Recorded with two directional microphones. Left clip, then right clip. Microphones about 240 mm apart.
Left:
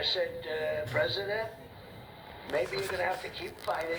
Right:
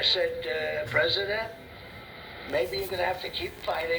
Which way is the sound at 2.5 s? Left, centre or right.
Right.